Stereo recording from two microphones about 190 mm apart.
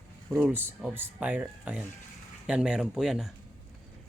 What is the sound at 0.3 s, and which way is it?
Speech, 10° right (ahead or behind).